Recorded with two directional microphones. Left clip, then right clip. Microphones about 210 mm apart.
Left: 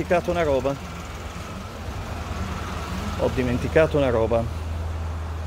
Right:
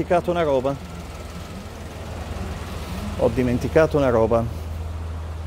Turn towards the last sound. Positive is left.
turn(degrees=-30)  # may be behind; listen again after turning